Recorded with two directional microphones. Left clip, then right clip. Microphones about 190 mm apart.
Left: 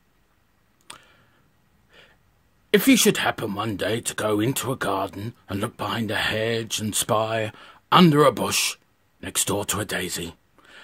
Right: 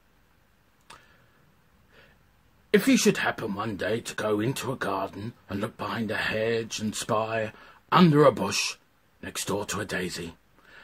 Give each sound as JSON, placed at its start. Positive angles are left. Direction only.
{"t": 2.7, "sound": "speech", "side_deg": 45}